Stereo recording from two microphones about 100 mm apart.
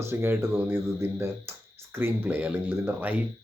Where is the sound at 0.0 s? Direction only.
25° right (ahead or behind).